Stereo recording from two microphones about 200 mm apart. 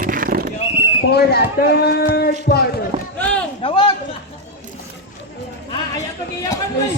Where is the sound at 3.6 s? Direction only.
25° left (ahead or behind).